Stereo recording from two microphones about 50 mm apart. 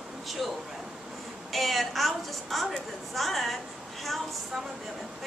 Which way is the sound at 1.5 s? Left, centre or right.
Centre.